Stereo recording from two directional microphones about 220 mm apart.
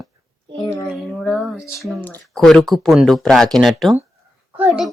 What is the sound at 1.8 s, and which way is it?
Speech, 5° left (ahead or behind).